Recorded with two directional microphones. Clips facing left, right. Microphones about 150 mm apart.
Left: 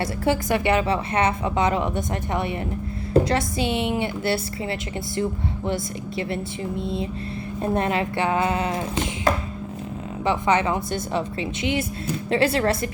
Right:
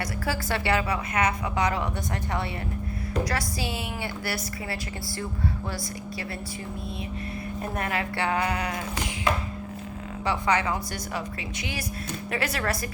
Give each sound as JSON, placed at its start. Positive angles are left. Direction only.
{"t": 0.0, "sound": "a woman's voice", "side_deg": 20}
{"t": 10.2, "sound": "a woman's voice", "side_deg": 20}